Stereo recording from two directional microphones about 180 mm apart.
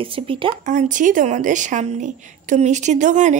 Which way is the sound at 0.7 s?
45° right (ahead or behind).